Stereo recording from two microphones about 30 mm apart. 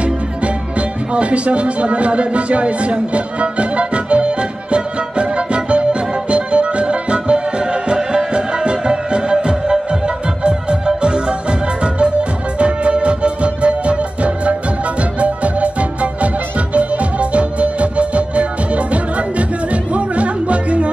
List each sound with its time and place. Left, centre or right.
0.0 s music: right